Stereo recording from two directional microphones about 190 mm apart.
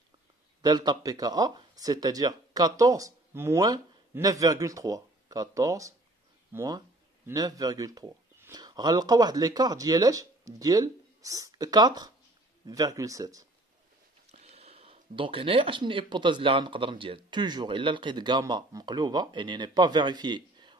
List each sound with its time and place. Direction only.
0.6 s speech: 20° right (ahead or behind)
14.2 s speech: 35° right (ahead or behind)